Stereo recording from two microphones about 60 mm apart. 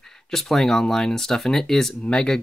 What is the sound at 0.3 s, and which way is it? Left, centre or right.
Speech, centre.